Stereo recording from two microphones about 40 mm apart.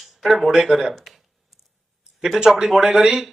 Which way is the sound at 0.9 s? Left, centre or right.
Centre.